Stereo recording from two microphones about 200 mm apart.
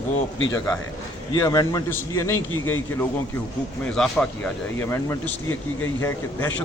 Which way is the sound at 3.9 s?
5° left (ahead or behind).